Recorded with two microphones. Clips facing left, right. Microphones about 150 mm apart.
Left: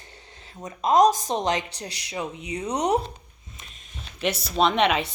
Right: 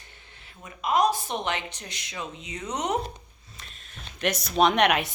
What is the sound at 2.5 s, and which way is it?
Speech, 15° left (ahead or behind).